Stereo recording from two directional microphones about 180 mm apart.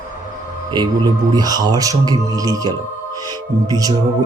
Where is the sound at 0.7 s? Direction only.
25° right (ahead or behind).